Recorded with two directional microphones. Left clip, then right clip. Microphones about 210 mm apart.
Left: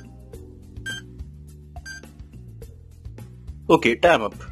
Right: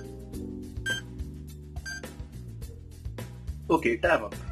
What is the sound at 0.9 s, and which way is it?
Music, centre (ahead or behind).